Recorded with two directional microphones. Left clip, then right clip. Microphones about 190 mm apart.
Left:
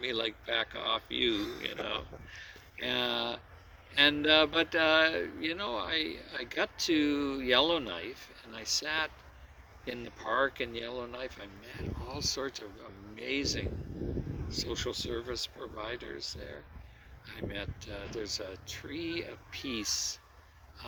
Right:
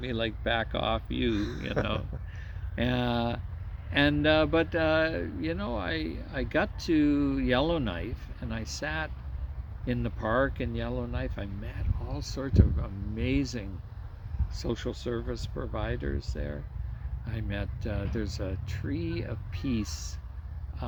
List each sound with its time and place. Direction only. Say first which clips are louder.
0.0 s speech: right 2 dB; 20° right (ahead or behind)
1.4 s speech: right 3 dB; 10° left (ahead or behind)
1.9 s speech: right 2 dB; 20° right (ahead or behind)